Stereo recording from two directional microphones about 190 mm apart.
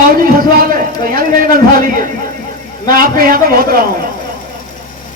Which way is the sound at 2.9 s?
50° right (ahead or behind).